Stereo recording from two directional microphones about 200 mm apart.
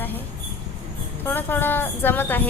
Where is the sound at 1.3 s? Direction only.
10° left (ahead or behind).